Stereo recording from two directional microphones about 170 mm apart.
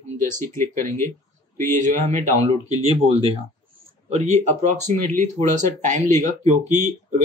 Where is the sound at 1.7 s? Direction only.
45° right (ahead or behind).